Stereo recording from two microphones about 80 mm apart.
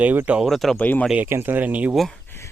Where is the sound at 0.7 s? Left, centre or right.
Centre.